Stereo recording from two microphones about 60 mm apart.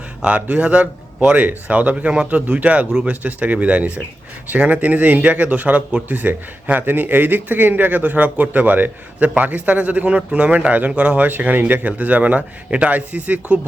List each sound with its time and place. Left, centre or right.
0.2 s speech: centre